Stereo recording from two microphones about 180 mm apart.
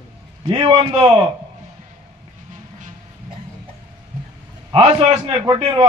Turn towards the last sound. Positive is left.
turn(degrees=-25)  # may be behind; listen again after turning